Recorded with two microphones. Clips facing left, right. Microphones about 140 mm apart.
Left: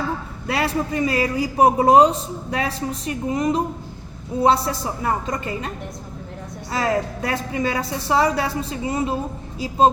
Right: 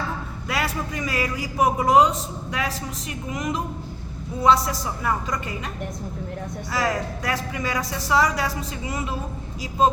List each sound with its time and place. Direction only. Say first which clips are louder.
0.4 s a man's voice: left 5 dB; 30° left (ahead or behind)
6.7 s a woman's voice: left 4 dB; 25° left (ahead or behind)